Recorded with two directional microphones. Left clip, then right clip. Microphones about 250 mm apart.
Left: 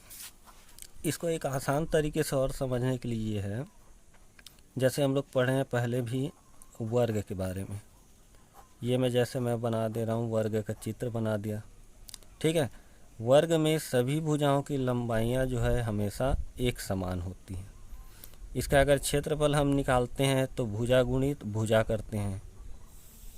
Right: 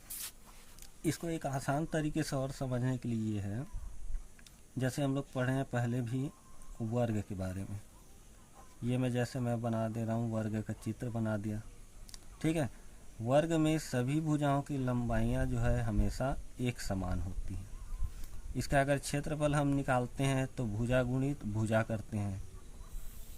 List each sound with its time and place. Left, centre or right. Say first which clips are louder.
0.8 s speech: left 4 dB; left
8.8 s speech: left 8 dB; left
12.1 s a sound: left 7 dB; left
13.2 s speech: left 6 dB; left
18.5 s speech: left 7 dB; left